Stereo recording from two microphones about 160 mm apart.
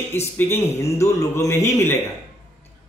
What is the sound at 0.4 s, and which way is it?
Speech, 15° left (ahead or behind).